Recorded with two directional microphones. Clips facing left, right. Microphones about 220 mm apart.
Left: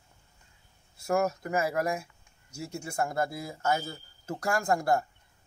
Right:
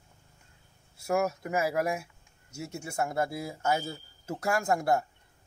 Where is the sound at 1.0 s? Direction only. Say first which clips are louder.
Left 1 dB; 5° right (ahead or behind).